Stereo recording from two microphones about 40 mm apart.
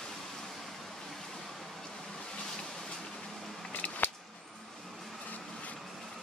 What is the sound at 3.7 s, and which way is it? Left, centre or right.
Scissors, left.